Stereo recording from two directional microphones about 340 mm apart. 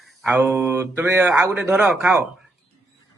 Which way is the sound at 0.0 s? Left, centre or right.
Centre.